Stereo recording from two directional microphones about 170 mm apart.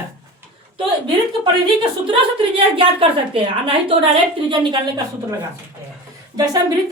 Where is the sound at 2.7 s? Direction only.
30° right (ahead or behind).